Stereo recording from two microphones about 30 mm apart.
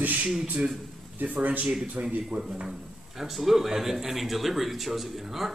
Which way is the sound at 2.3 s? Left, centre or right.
Right.